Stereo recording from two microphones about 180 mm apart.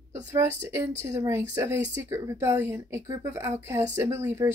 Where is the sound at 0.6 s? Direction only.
15° right (ahead or behind).